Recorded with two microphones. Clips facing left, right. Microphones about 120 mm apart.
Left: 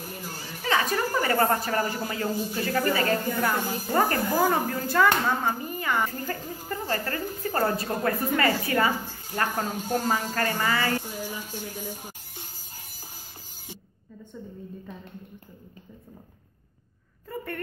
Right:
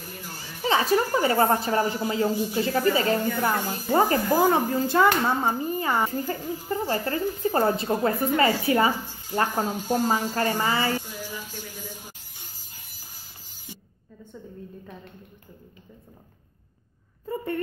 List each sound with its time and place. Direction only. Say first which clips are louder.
0.6 s a woman's voice: right 4 dB; 30° right (ahead or behind)
6.2 s a woman's voice: right 4 dB; 20° right (ahead or behind)
9.8 s a woman's voice: right 2 dB; 10° right (ahead or behind)